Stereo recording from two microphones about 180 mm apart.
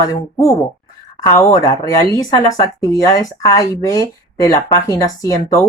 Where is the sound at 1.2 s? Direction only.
20° left (ahead or behind).